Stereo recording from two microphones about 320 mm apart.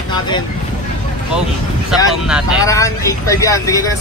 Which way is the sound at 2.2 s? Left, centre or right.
Centre.